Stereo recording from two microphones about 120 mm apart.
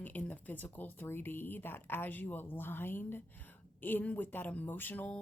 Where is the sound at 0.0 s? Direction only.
15° left (ahead or behind).